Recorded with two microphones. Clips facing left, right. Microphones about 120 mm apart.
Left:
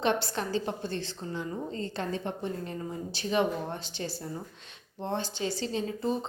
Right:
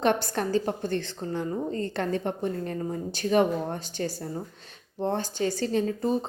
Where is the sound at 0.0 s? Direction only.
50° right (ahead or behind).